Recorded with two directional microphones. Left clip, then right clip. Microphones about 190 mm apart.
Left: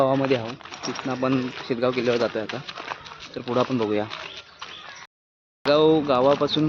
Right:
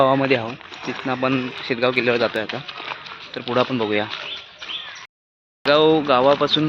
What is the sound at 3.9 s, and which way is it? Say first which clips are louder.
Speech: right 3 dB; centre (ahead or behind).